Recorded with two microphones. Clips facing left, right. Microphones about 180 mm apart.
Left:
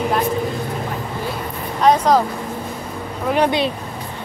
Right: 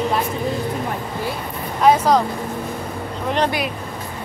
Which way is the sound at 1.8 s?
5° right (ahead or behind).